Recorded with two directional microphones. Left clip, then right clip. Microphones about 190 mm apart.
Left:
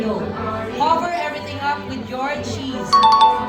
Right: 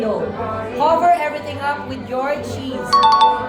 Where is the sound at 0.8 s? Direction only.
60° right (ahead or behind).